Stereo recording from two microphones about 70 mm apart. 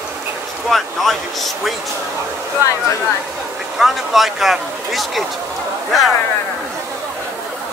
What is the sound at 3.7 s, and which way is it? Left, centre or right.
Speech, centre.